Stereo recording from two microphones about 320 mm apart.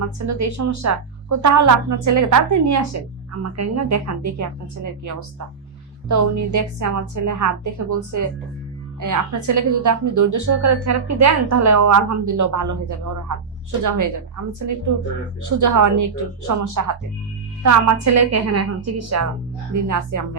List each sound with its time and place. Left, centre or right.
0.0 s a woman's voice: right
19.7 s speech: right